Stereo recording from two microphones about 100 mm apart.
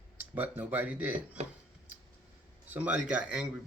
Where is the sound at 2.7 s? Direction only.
15° right (ahead or behind).